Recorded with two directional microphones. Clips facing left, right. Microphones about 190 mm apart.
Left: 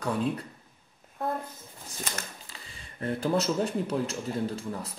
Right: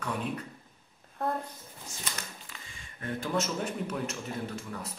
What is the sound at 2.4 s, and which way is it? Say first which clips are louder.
Speech: left 1 dB; 35° left (ahead or behind).